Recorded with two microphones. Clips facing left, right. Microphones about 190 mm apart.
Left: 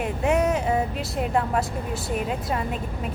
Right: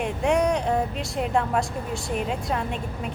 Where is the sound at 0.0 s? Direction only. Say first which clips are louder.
Even; 5° left (ahead or behind).